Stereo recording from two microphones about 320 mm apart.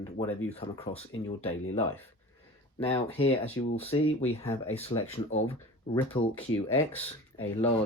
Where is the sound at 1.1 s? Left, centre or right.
Left.